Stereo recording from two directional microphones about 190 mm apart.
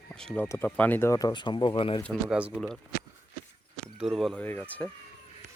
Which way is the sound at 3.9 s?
Centre (ahead or behind).